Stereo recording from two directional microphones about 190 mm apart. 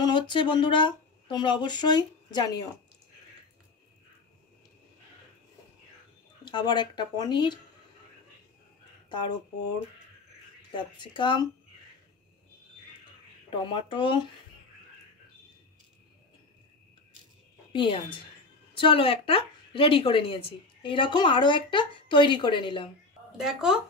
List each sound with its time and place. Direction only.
0.0 s speech: 25° left (ahead or behind)
6.4 s a woman's voice: 25° left (ahead or behind)
9.1 s a woman's voice: 25° left (ahead or behind)
10.7 s a woman's voice: 25° left (ahead or behind)
13.7 s a woman's voice: 25° left (ahead or behind)
17.7 s a woman's voice: 25° left (ahead or behind)
23.3 s speech: 5° right (ahead or behind)